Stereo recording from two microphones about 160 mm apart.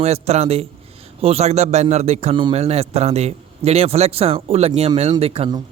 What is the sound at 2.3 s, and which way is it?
Speech, 30° right (ahead or behind).